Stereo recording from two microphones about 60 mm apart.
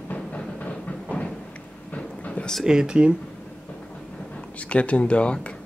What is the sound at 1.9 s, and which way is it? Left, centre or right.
Train, left.